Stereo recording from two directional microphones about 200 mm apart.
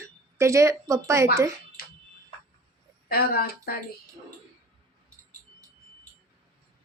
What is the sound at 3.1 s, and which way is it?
Speech, 50° left (ahead or behind).